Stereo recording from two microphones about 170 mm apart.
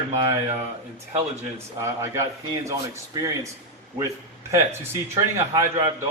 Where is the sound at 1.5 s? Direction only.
15° right (ahead or behind).